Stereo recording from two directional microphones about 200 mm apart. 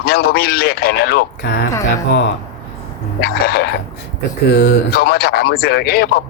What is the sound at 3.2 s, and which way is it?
Speech, 50° left (ahead or behind).